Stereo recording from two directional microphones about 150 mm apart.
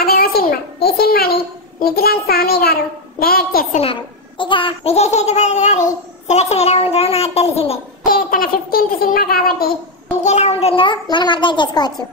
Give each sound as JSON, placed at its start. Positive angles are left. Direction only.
{"t": 0.0, "sound": "a child's voice", "side_deg": 90}
{"t": 3.7, "sound": "a child's voice", "side_deg": 35}
{"t": 8.1, "sound": "a sound", "side_deg": 70}
{"t": 10.2, "sound": "a child's voice", "side_deg": 50}